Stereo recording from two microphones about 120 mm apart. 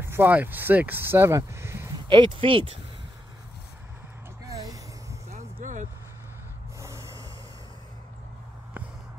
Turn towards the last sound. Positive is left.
turn(degrees=-25)  # may be behind; listen again after turning